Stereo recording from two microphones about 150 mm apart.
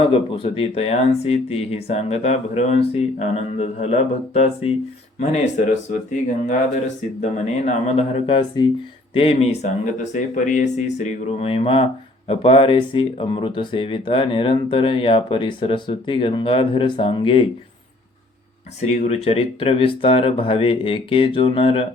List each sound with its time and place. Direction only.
0.0 s speech: 35° left (ahead or behind)
8.6 s speech: 30° left (ahead or behind)
9.1 s speech: 40° left (ahead or behind)
18.9 s speech: 45° left (ahead or behind)